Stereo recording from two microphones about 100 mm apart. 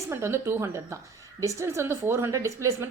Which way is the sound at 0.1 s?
25° right (ahead or behind).